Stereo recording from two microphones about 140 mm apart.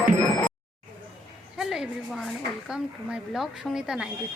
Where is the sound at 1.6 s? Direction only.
Centre (ahead or behind).